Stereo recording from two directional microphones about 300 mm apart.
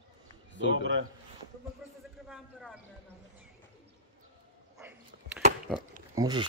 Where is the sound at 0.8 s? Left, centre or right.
Right.